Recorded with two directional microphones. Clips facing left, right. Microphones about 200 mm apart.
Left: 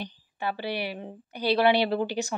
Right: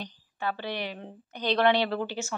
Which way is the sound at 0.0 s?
10° left (ahead or behind).